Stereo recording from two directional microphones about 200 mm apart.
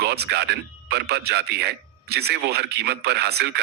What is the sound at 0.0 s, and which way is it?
Speech, 55° right (ahead or behind).